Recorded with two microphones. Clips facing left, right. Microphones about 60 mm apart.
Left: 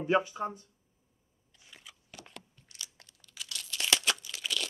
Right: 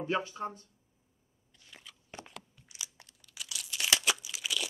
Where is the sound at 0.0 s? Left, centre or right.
Left.